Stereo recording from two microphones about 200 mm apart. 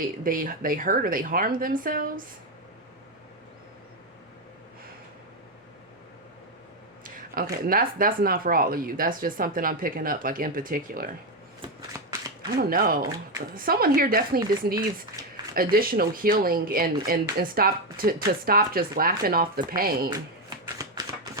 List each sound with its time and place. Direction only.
0.3 s speech: 45° right (ahead or behind)
7.0 s speech: 45° right (ahead or behind)
11.9 s a sound: 15° right (ahead or behind)
12.5 s speech: 45° right (ahead or behind)
13.0 s speech: 15° right (ahead or behind)
13.5 s speech: 45° right (ahead or behind)
15.2 s a sound: 15° right (ahead or behind)
15.5 s speech: 50° right (ahead or behind)